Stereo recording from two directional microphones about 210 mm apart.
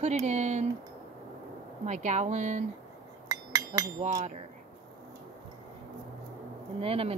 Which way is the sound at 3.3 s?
15° right (ahead or behind).